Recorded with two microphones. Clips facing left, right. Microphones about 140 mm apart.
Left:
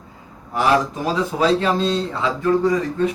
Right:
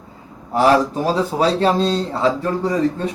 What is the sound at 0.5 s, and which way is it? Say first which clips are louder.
Speech: right 4 dB; 35° right (ahead or behind).